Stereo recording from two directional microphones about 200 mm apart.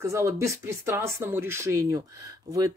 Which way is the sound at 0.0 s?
15° right (ahead or behind).